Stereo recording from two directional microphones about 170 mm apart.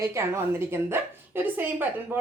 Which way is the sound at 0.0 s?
15° right (ahead or behind).